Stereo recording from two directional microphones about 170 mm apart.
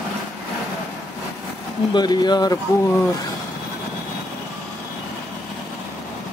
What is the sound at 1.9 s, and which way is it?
Speech, 25° left (ahead or behind).